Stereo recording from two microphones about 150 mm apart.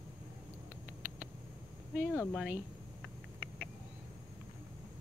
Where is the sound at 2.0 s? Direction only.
15° left (ahead or behind).